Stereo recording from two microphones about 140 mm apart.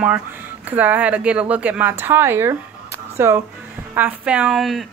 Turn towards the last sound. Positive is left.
turn(degrees=0)  # may be behind; listen again after turning